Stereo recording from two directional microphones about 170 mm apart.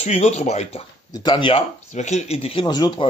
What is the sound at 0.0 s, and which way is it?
Speech, 40° left (ahead or behind).